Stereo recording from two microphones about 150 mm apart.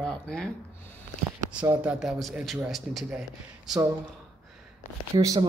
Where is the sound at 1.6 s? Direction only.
15° right (ahead or behind).